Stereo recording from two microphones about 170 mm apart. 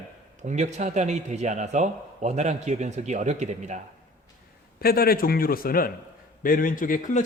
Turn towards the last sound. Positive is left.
turn(degrees=50)  # may be behind; listen again after turning